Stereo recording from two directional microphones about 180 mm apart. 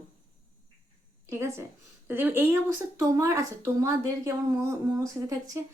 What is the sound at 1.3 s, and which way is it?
A woman's voice, 15° right (ahead or behind).